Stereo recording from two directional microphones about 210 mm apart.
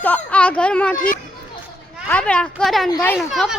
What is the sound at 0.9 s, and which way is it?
Speech, 40° left (ahead or behind).